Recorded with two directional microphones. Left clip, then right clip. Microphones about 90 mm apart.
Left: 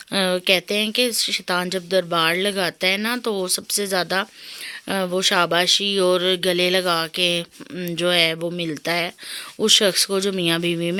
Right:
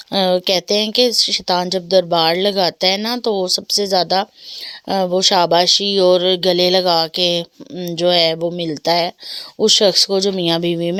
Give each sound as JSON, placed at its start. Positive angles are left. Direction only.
{"t": 0.1, "sound": "speech", "side_deg": -40}
{"t": 7.8, "sound": "speech", "side_deg": -25}
{"t": 9.6, "sound": "speech", "side_deg": -30}
{"t": 10.4, "sound": "speech", "side_deg": -40}